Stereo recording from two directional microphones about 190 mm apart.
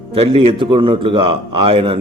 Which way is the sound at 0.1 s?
30° right (ahead or behind).